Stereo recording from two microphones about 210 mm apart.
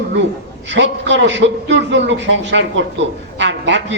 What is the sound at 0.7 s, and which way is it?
A man's voice, 60° right (ahead or behind).